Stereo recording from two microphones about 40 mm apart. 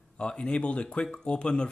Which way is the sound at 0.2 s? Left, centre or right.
Left.